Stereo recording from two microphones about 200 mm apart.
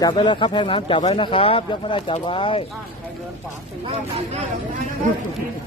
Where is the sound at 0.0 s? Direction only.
25° left (ahead or behind).